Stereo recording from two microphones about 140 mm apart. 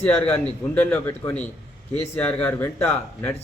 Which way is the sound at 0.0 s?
15° left (ahead or behind).